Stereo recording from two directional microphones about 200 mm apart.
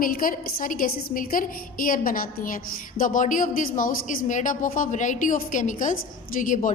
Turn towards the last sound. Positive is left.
turn(degrees=40)  # may be behind; listen again after turning